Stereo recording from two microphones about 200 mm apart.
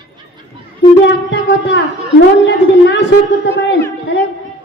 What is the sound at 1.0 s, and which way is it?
A man's voice, 60° left (ahead or behind).